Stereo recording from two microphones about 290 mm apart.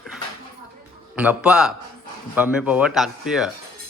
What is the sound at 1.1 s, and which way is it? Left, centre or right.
A man's voice, centre.